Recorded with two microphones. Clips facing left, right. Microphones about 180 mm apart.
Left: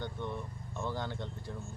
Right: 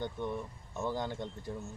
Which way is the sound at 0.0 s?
15° right (ahead or behind).